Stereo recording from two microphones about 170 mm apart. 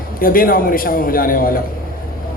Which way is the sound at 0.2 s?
55° left (ahead or behind).